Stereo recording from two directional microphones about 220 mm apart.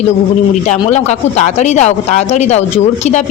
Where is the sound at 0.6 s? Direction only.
30° left (ahead or behind).